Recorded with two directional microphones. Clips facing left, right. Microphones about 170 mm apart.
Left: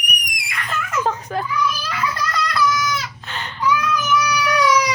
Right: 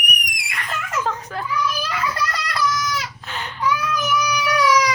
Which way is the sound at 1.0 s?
20° left (ahead or behind).